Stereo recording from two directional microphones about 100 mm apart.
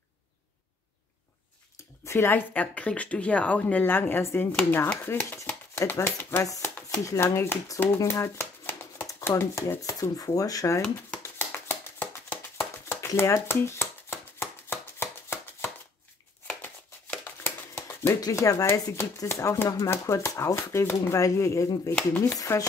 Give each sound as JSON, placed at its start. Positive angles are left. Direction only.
{"t": 2.0, "sound": "speech", "side_deg": 20}
{"t": 5.9, "sound": "speech", "side_deg": 30}
{"t": 8.0, "sound": "shuffling cards", "side_deg": 30}
{"t": 9.0, "sound": "speech", "side_deg": 30}
{"t": 10.8, "sound": "shuffling cards", "side_deg": 20}
{"t": 16.6, "sound": "a sound", "side_deg": 20}
{"t": 18.2, "sound": "speech", "side_deg": 35}